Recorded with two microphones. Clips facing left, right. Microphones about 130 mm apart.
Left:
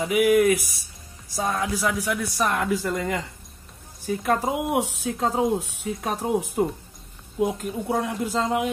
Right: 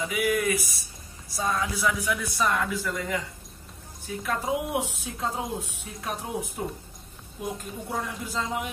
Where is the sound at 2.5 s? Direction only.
65° left (ahead or behind).